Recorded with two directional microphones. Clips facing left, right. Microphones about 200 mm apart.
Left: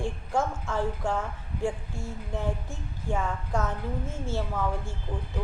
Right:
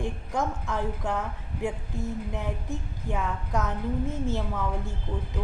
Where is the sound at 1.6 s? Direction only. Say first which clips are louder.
Even; 20° right (ahead or behind).